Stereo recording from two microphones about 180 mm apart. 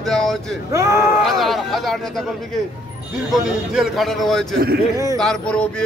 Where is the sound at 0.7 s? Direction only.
15° right (ahead or behind).